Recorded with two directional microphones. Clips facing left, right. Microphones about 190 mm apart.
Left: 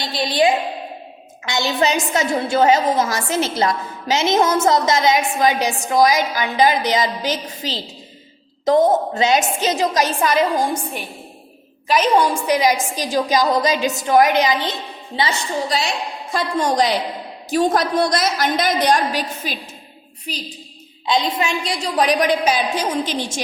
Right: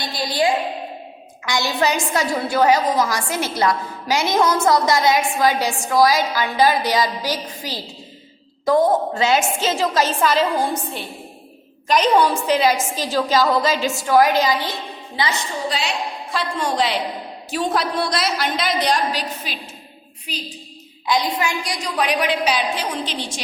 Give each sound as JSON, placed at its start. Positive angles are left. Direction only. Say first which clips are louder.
{"t": 0.0, "sound": "a woman's voice", "louder": "left 3 dB", "side_deg": 20}
{"t": 16.3, "sound": "a woman's voice", "louder": "left 4 dB", "side_deg": 45}
{"t": 21.1, "sound": "a woman's voice", "louder": "left 1 dB", "side_deg": 25}
{"t": 21.9, "sound": "a woman's voice", "louder": "left 4 dB", "side_deg": 40}